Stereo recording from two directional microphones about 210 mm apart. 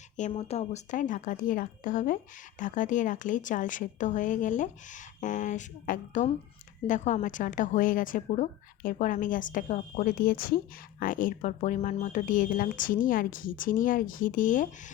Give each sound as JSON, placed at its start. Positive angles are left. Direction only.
{"t": 0.2, "sound": "speech", "side_deg": 30}